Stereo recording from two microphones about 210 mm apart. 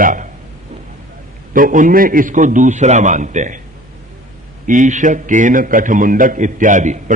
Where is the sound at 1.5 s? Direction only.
40° right (ahead or behind).